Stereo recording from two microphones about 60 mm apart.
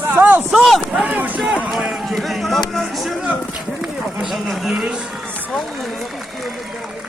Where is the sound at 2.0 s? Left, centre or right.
Centre.